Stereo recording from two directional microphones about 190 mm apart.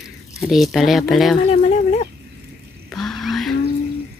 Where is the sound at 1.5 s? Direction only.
35° left (ahead or behind).